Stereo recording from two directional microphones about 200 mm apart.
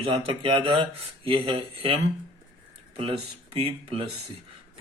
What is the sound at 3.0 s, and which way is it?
Speech, 25° right (ahead or behind).